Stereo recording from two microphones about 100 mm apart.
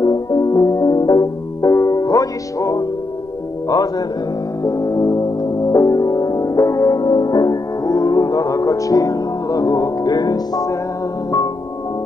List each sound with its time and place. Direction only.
0.0 s music: 40° left (ahead or behind)